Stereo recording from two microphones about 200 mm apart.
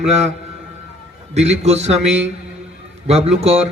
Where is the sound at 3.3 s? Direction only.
30° right (ahead or behind).